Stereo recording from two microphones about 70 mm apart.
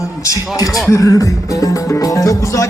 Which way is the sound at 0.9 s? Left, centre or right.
Left.